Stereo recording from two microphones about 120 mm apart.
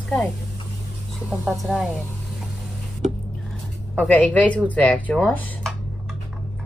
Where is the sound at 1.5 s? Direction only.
Centre (ahead or behind).